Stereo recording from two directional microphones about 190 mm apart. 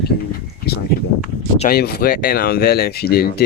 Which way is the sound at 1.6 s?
55° left (ahead or behind).